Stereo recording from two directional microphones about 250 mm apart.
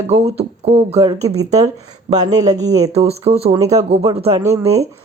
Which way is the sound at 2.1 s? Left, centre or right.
Centre.